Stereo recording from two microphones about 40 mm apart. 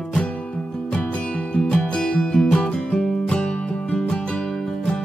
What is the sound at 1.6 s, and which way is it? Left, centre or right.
Music, centre.